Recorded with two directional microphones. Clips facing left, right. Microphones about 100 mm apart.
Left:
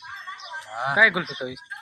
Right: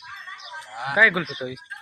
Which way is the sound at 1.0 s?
15° left (ahead or behind).